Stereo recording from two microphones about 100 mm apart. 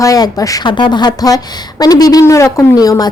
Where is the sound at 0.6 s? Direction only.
50° left (ahead or behind).